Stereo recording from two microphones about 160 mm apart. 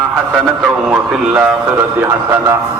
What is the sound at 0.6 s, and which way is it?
Speech, 10° right (ahead or behind).